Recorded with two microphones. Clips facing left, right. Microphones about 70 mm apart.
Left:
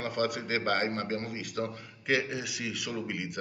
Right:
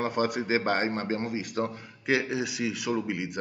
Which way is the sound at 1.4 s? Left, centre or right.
Right.